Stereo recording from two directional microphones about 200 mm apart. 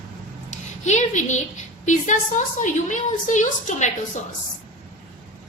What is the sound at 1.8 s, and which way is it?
A woman's voice, 40° left (ahead or behind).